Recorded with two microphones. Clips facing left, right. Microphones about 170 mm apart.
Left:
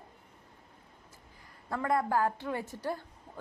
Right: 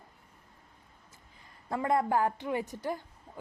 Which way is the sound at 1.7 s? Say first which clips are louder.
Right 1 dB; 20° right (ahead or behind).